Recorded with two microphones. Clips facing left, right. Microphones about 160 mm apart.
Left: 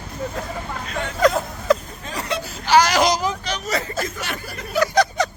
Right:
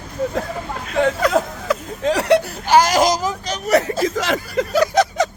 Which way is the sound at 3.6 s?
70° right (ahead or behind).